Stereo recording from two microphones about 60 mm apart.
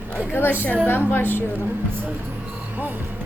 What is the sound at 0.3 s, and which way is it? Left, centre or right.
A woman's voice, left.